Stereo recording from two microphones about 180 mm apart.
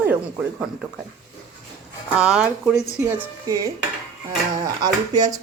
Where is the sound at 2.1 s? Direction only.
5° right (ahead or behind).